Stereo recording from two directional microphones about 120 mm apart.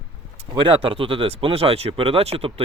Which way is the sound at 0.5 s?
45° right (ahead or behind).